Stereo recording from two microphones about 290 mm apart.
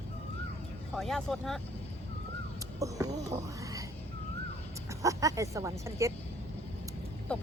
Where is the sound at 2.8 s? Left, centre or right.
Centre.